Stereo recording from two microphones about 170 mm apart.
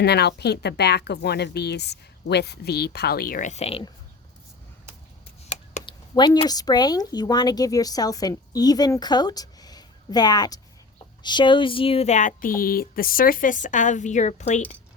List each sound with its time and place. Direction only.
0.0 s a woman's voice: 75° left (ahead or behind); by 3.8 s 35° left (ahead or behind)
5.8 s speech: 25° left (ahead or behind); by 14.6 s 45° left (ahead or behind)